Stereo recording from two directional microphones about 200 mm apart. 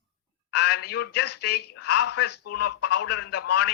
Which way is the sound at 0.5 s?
55° left (ahead or behind).